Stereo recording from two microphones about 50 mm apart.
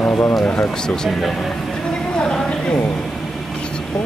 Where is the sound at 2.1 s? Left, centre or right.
Left.